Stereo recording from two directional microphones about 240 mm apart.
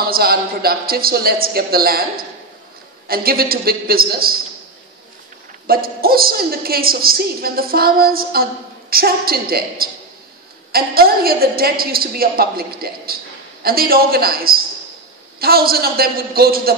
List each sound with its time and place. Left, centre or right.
0.0 s a woman's voice: right
5.7 s a woman's voice: right